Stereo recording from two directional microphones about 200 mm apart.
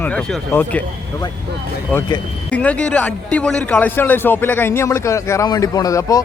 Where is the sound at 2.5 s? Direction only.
5° left (ahead or behind).